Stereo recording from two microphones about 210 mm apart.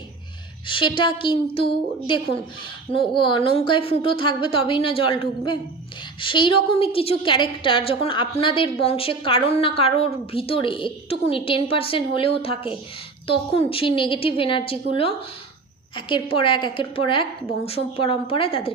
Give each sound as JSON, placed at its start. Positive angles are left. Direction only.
{"t": 0.7, "sound": "a woman's voice", "side_deg": 25}